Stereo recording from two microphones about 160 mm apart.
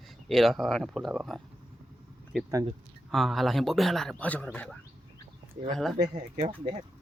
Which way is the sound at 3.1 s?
Centre (ahead or behind).